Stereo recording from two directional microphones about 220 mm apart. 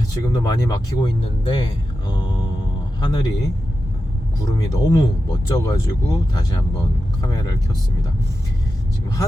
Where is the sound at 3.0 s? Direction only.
20° left (ahead or behind).